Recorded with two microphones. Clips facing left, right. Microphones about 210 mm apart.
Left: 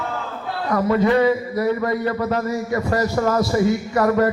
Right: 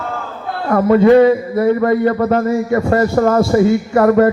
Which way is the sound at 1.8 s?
50° right (ahead or behind).